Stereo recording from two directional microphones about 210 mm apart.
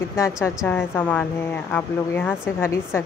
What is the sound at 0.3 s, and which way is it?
Speech, 5° right (ahead or behind).